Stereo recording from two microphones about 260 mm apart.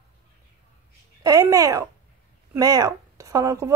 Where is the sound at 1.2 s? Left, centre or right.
Centre.